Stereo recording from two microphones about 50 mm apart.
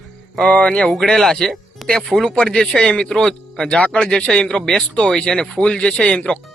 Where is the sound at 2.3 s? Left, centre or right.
Centre.